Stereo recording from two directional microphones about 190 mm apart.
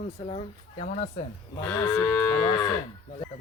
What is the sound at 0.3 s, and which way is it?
Speech, 30° left (ahead or behind).